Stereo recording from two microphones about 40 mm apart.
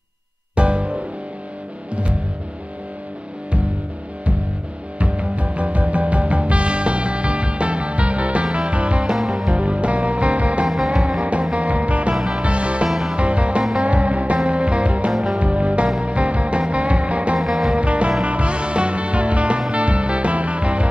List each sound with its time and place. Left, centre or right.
0.6 s music: right
4.9 s music: right
9.1 s music: centre
9.6 s music: right
11.0 s music: centre
11.5 s music: right
17.4 s music: centre
17.7 s music: right